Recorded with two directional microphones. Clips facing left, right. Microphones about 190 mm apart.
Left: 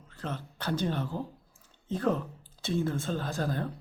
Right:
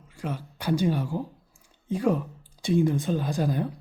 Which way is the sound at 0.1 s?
10° right (ahead or behind).